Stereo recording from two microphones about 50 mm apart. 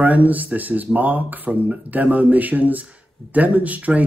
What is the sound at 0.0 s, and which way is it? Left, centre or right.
Speech, right.